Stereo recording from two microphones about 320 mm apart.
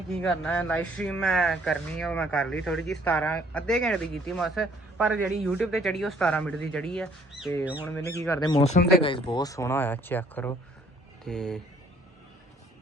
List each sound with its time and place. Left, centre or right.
0.1 s speech: centre
7.9 s speech: centre